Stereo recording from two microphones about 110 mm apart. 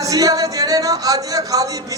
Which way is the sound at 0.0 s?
30° right (ahead or behind).